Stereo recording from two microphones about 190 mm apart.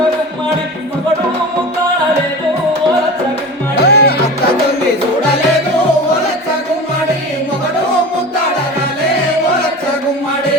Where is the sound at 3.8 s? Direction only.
55° left (ahead or behind).